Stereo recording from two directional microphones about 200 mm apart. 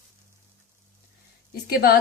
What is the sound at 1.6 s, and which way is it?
Speech, 50° left (ahead or behind).